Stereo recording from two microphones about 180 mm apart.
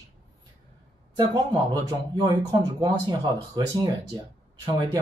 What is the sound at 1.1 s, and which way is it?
Speech, 25° right (ahead or behind).